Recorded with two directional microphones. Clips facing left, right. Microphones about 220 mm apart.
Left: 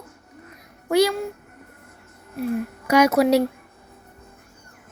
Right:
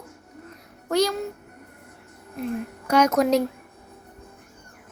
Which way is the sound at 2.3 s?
10° left (ahead or behind).